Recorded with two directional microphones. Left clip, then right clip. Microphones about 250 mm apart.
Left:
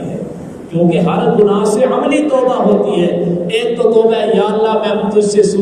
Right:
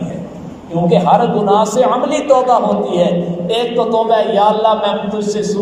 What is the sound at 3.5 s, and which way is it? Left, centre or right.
A man's voice, centre.